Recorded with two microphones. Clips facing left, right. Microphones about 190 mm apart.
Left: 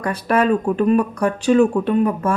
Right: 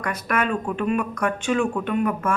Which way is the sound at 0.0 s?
30° left (ahead or behind).